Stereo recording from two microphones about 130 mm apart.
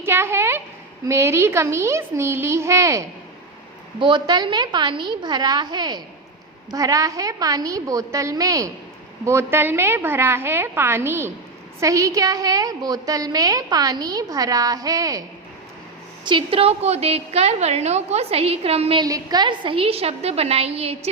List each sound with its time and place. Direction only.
0.0 s a sound: 20° right (ahead or behind)
1.0 s a woman's voice: 20° right (ahead or behind)
4.0 s a woman's voice: 35° right (ahead or behind)
16.2 s a woman's voice: 40° right (ahead or behind)
19.0 s a woman's voice: 30° right (ahead or behind); by 21.1 s 50° right (ahead or behind)